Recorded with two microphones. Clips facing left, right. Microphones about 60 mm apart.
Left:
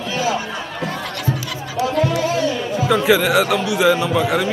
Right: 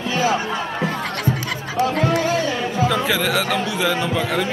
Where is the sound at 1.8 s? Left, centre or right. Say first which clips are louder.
Even; right.